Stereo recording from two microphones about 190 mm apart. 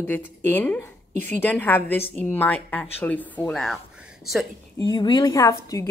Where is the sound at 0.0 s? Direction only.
10° left (ahead or behind).